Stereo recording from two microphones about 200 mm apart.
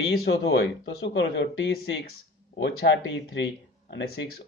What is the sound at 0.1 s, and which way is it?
Speech, 65° left (ahead or behind).